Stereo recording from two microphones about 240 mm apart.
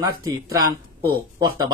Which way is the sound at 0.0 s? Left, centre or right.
Centre.